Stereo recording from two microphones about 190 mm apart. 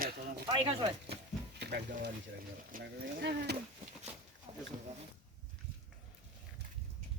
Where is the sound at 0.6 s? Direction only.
30° right (ahead or behind).